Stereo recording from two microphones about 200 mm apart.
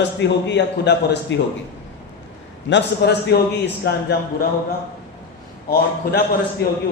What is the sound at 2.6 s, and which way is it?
A man's voice, 60° left (ahead or behind).